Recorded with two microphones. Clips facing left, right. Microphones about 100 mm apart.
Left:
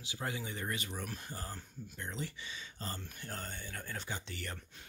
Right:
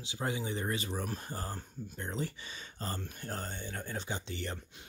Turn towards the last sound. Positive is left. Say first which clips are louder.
# right 4 dB
turn(degrees=-25)  # may be behind; listen again after turning